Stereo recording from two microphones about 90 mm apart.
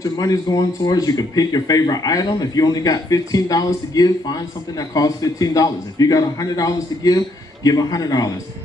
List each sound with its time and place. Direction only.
0.0 s speech: 45° left (ahead or behind)